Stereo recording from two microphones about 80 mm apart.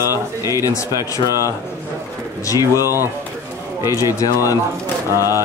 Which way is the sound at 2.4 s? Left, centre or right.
Left.